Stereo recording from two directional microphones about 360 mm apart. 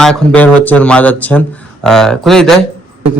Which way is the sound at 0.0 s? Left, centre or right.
Centre.